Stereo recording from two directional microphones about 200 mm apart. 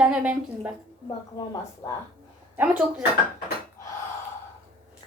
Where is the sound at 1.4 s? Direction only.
20° left (ahead or behind).